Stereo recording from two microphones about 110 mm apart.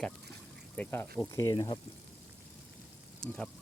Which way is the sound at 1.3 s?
30° left (ahead or behind).